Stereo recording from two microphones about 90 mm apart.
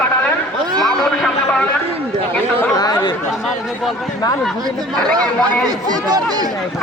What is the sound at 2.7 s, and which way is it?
Chatter, 45° left (ahead or behind).